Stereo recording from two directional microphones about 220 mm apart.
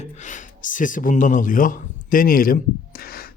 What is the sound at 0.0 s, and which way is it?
Speech, 35° left (ahead or behind).